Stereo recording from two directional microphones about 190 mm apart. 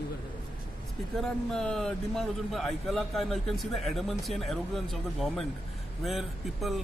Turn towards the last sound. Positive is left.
turn(degrees=0)  # may be behind; listen again after turning